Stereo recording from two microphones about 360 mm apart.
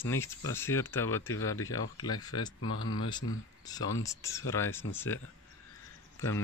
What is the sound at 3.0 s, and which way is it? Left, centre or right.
Speech, centre.